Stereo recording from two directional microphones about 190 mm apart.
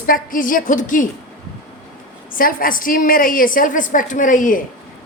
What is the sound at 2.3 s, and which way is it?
A woman's voice, 50° left (ahead or behind).